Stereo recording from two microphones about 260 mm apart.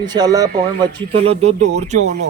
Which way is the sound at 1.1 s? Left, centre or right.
Right.